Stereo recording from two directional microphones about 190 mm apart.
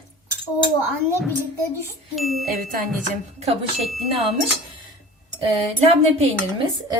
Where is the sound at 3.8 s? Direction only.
Centre (ahead or behind).